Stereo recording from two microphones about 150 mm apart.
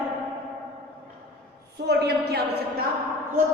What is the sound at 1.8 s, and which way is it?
Speech, 90° right.